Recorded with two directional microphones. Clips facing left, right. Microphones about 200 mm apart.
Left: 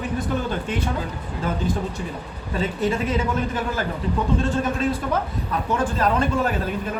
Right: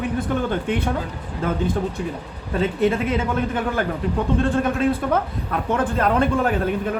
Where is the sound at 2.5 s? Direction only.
55° right (ahead or behind).